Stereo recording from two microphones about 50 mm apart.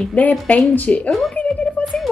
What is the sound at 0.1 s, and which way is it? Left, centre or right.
Speech, left.